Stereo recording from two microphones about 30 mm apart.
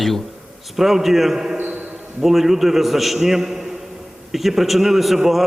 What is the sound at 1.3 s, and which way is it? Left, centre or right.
A man's voice, centre.